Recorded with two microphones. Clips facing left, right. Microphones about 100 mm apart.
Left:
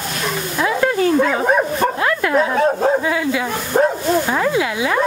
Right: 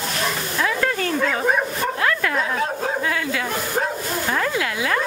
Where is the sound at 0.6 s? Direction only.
15° left (ahead or behind).